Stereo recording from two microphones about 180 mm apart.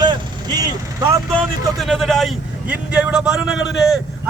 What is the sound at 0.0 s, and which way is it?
Vehicle, 25° right (ahead or behind).